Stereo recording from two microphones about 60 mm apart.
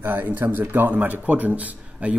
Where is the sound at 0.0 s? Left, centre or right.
Right.